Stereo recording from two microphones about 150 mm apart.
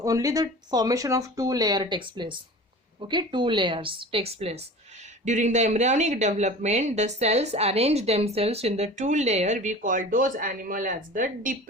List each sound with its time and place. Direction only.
0.0 s a woman's voice: 20° right (ahead or behind); by 4.6 s 40° right (ahead or behind)
5.2 s speech: 55° right (ahead or behind)